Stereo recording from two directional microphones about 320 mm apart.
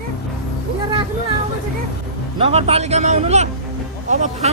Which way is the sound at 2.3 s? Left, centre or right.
Centre.